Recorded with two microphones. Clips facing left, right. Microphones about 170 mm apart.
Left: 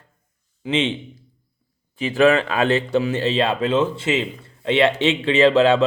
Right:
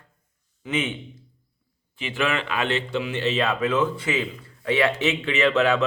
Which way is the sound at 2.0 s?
40° left (ahead or behind).